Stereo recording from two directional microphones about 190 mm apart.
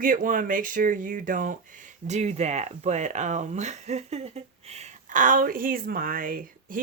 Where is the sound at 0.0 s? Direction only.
45° right (ahead or behind).